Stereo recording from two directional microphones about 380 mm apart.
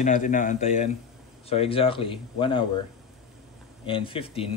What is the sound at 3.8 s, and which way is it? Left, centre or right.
Speech, centre.